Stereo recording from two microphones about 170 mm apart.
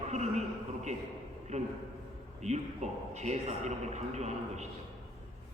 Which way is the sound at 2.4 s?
40° right (ahead or behind).